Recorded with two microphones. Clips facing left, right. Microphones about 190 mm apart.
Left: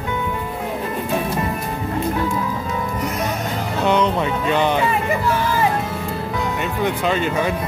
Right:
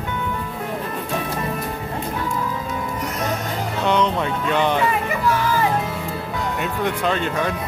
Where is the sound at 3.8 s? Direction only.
5° left (ahead or behind).